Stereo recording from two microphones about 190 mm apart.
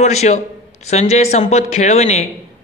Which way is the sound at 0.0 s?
35° left (ahead or behind).